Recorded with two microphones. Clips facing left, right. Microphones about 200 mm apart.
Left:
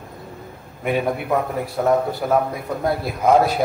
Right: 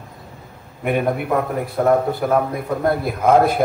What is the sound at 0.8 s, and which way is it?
A man's voice, 55° right (ahead or behind).